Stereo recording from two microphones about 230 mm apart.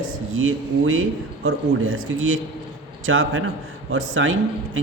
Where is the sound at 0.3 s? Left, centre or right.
Right.